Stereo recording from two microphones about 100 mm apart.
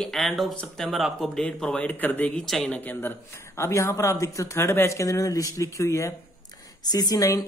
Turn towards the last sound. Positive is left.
turn(degrees=35)  # may be behind; listen again after turning